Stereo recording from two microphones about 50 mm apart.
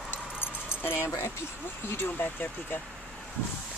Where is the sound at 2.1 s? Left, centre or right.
Left.